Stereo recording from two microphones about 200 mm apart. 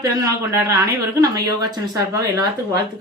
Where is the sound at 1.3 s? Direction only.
20° right (ahead or behind).